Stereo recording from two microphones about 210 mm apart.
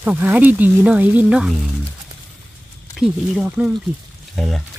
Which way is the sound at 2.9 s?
5° right (ahead or behind).